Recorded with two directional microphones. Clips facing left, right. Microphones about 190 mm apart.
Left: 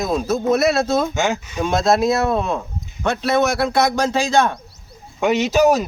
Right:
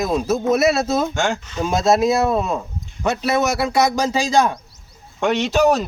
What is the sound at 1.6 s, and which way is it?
A man's voice, 10° right (ahead or behind).